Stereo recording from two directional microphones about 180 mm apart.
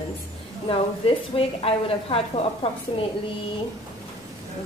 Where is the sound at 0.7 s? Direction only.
30° left (ahead or behind).